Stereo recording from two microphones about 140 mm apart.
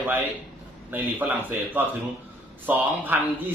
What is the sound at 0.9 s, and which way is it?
A man's voice, 10° right (ahead or behind).